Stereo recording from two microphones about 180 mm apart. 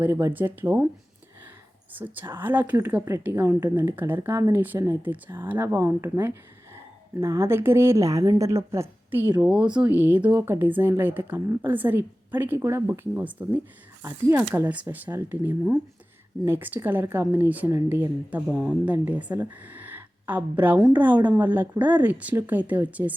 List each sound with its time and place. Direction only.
0.0 s speech: 15° right (ahead or behind)
1.9 s speech: 10° right (ahead or behind)